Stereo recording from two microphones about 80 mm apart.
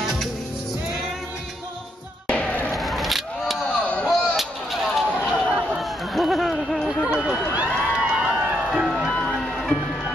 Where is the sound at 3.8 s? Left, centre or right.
Centre.